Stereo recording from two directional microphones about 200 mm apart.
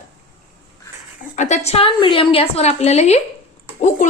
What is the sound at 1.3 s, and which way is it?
A woman's voice, 35° left (ahead or behind).